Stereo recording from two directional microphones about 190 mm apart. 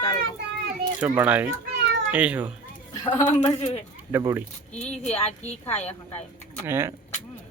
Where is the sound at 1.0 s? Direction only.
10° right (ahead or behind).